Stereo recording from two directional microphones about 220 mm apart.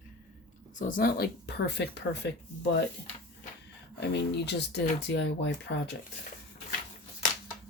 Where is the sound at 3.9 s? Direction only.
50° left (ahead or behind).